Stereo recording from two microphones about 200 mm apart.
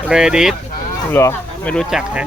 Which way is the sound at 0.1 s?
5° right (ahead or behind).